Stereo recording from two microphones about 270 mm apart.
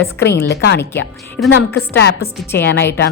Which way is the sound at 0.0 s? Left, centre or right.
Left.